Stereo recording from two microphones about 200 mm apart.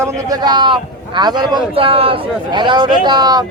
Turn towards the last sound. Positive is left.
turn(degrees=-20)  # may be behind; listen again after turning